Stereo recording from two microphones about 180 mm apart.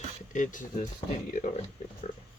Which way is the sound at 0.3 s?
45° left (ahead or behind).